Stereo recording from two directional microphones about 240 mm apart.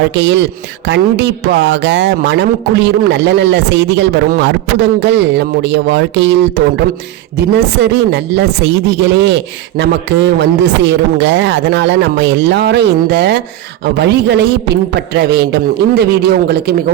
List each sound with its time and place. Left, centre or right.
0.1 s speech: right